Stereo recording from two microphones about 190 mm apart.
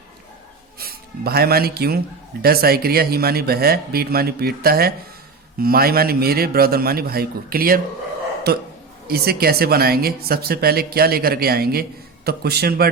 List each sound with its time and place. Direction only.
0.8 s a man's voice: 55° right (ahead or behind)